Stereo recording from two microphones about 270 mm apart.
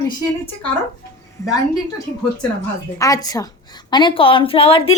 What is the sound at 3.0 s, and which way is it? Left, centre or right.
A woman's voice, centre.